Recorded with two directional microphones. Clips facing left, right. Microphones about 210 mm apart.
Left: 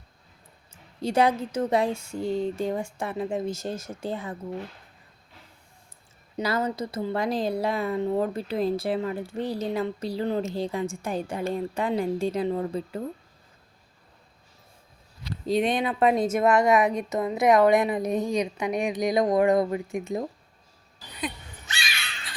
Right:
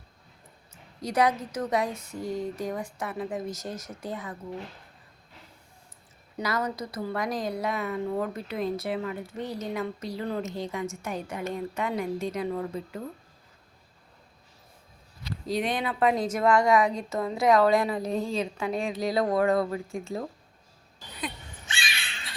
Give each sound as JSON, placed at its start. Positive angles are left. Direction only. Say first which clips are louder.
{"t": 0.7, "sound": "speech", "louder": "left 5 dB", "side_deg": 30}
{"t": 6.3, "sound": "a woman's voice", "louder": "left 3 dB", "side_deg": 30}
{"t": 15.4, "sound": "speech", "louder": "left 5 dB", "side_deg": 25}
{"t": 21.8, "sound": "crow", "louder": "left 1 dB", "side_deg": -30}